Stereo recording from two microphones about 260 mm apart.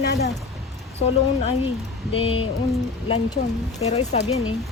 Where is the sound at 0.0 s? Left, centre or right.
Left.